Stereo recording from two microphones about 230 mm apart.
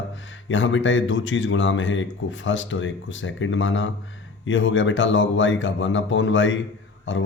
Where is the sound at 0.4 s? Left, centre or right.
Left.